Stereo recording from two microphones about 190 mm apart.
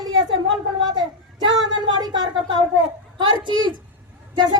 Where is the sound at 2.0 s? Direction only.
20° right (ahead or behind).